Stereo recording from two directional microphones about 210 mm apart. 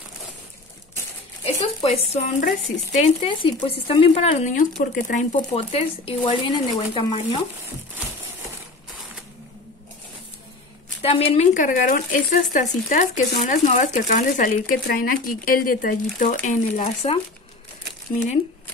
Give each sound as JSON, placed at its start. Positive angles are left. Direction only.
{"t": 1.4, "sound": "speech", "side_deg": 25}
{"t": 11.0, "sound": "speech", "side_deg": 30}